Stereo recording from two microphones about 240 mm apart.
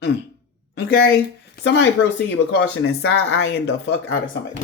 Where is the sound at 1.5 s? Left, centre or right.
Left.